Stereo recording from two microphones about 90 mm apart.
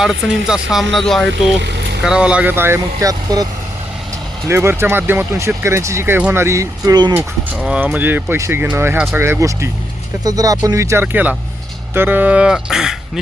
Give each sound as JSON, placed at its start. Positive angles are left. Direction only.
{"t": 0.0, "sound": "speech", "side_deg": -5}
{"t": 3.0, "sound": "speech", "side_deg": -45}
{"t": 4.4, "sound": "speech", "side_deg": -30}
{"t": 7.5, "sound": "speech", "side_deg": -10}
{"t": 7.8, "sound": "speech", "side_deg": -20}
{"t": 9.4, "sound": "speech", "side_deg": -35}
{"t": 11.0, "sound": "speech", "side_deg": -20}